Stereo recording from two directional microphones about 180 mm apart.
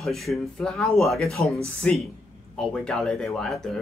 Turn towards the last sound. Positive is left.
turn(degrees=0)  # may be behind; listen again after turning